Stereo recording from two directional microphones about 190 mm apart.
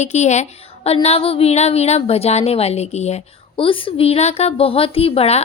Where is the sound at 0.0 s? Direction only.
35° left (ahead or behind).